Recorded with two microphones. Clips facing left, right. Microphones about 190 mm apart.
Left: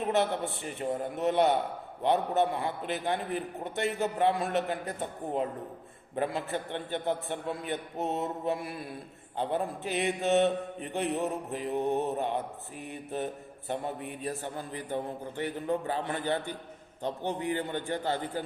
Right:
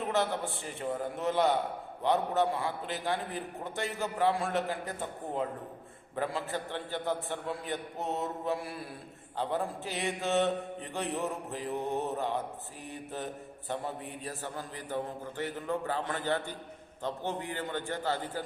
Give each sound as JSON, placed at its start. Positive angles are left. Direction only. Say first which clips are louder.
{"t": 0.0, "sound": "mantra", "louder": "left 3 dB", "side_deg": 20}